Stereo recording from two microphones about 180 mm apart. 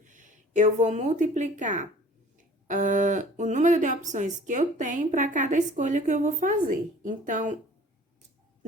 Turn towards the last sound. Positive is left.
turn(degrees=-45)  # may be behind; listen again after turning